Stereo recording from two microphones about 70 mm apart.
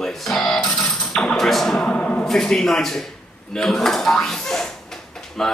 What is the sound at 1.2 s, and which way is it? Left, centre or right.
A man's voice, centre.